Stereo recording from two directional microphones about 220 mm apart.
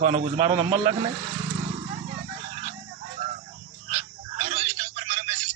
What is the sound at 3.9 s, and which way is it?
Telephone, 30° right (ahead or behind).